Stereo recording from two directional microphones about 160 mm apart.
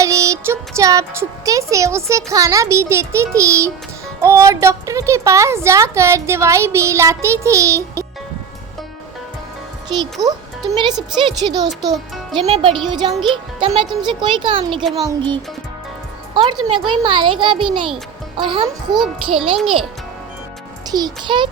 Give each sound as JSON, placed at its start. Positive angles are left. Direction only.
{"t": 0.0, "sound": "music", "side_deg": -20}
{"t": 0.8, "sound": "a woman's voice", "side_deg": -20}
{"t": 9.9, "sound": "a child's voice", "side_deg": -25}
{"t": 18.9, "sound": "a child's voice", "side_deg": 0}
{"t": 20.9, "sound": "speech", "side_deg": -25}